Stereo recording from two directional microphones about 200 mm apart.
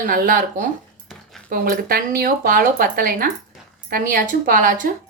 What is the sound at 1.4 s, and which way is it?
A woman's voice, 45° right (ahead or behind).